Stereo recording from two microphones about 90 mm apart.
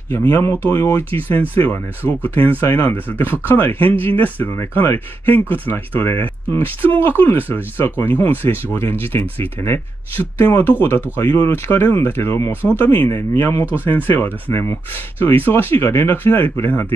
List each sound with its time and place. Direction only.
0.1 s speech: 25° left (ahead or behind)